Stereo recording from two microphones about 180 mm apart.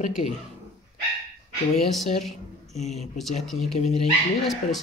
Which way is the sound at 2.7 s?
40° left (ahead or behind).